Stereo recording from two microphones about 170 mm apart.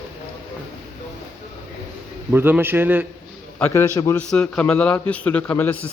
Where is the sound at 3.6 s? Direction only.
15° left (ahead or behind).